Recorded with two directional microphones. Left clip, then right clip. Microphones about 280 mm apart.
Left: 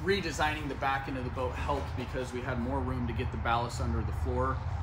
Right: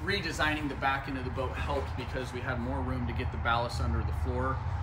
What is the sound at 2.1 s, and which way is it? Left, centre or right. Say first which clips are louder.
Speech: even; left.